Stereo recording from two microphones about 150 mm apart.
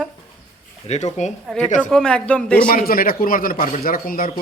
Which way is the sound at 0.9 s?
50° left (ahead or behind).